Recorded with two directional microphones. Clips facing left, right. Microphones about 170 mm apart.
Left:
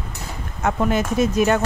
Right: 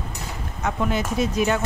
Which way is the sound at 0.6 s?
50° left (ahead or behind).